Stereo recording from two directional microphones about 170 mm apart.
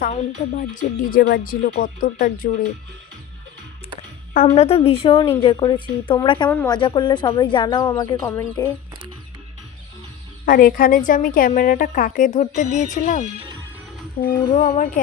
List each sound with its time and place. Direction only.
0.0 s speech: 50° left (ahead or behind)
4.4 s a woman's voice: 40° left (ahead or behind); by 8.7 s 20° left (ahead or behind)
10.4 s speech: 55° left (ahead or behind)